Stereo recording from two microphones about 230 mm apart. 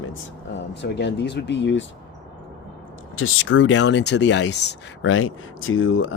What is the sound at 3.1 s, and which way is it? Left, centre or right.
Speech, left.